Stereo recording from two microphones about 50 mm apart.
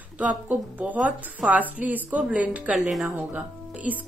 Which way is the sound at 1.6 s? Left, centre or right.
Right.